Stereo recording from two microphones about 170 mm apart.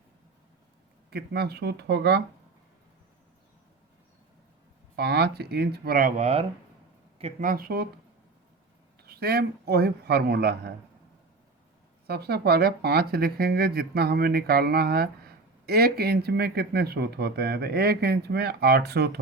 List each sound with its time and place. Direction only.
1.1 s speech: 70° right (ahead or behind)
4.9 s speech: 75° right (ahead or behind); by 6.4 s 40° right (ahead or behind)
7.4 s speech: 60° right (ahead or behind)
9.0 s speech: 70° right (ahead or behind)
12.0 s speech: 70° right (ahead or behind)